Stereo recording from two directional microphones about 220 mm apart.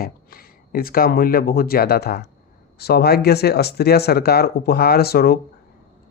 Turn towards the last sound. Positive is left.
turn(degrees=45)  # may be behind; listen again after turning